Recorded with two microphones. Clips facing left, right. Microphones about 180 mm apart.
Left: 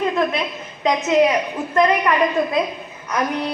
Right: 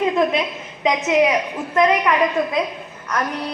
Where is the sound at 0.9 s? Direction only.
10° right (ahead or behind).